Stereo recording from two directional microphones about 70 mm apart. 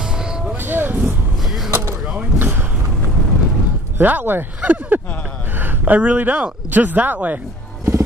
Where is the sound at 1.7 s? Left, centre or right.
Right.